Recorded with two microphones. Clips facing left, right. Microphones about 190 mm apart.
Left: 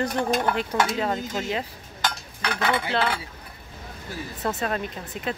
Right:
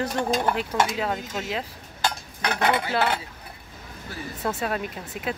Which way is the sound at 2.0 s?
40° right (ahead or behind).